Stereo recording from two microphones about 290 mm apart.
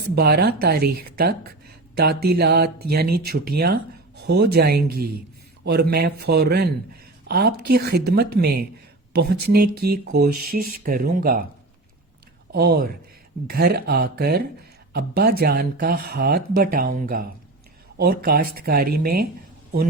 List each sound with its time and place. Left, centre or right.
0.2 s speech: right
12.5 s speech: right